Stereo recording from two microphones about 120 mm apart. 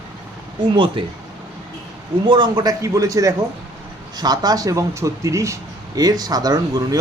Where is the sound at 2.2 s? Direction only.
40° right (ahead or behind).